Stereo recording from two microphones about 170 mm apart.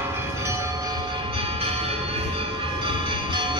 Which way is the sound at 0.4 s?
20° right (ahead or behind).